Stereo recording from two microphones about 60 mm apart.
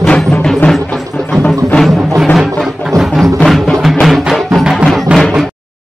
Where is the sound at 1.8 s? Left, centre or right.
Centre.